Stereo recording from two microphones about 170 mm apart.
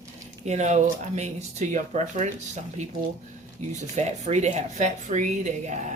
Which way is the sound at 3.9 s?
40° right (ahead or behind).